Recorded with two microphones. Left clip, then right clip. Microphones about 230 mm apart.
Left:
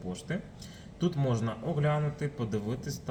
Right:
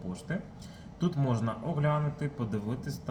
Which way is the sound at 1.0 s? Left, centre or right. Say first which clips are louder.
Left 1 dB; centre.